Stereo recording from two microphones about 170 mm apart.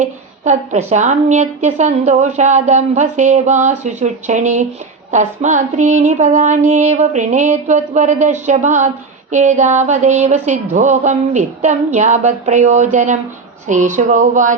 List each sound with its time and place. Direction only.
0.0 s a woman's voice: 45° right (ahead or behind)